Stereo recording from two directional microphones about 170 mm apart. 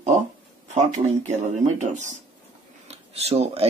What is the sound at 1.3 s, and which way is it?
Speech, 45° right (ahead or behind).